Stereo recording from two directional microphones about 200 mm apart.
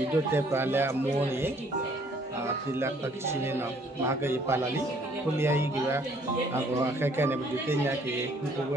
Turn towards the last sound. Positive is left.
turn(degrees=-10)  # may be behind; listen again after turning